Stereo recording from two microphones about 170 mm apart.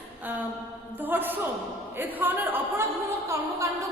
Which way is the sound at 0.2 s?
10° right (ahead or behind).